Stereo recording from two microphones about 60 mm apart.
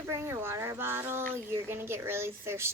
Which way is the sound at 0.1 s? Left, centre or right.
Right.